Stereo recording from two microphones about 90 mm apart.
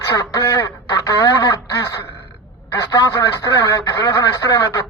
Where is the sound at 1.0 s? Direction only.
35° left (ahead or behind).